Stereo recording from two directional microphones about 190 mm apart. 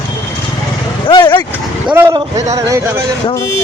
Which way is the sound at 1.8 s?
10° right (ahead or behind).